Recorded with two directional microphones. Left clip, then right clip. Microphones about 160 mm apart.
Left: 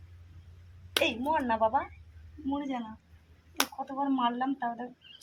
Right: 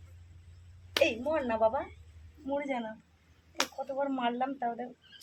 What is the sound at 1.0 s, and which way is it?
Speech, 20° right (ahead or behind).